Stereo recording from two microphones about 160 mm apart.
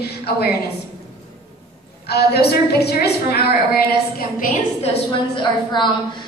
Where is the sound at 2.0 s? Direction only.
90° left.